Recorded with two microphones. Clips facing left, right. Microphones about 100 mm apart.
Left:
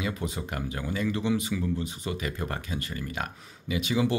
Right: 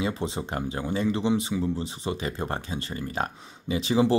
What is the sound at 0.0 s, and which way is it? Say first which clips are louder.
Speech: right 3 dB; 25° right (ahead or behind).